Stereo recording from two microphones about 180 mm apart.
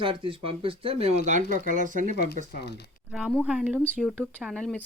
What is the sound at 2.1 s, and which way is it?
Speech, 60° left (ahead or behind).